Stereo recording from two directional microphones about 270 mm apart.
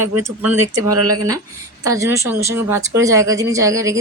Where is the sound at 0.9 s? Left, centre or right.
Right.